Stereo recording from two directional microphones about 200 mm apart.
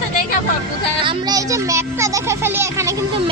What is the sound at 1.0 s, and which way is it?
A child's voice, 20° right (ahead or behind).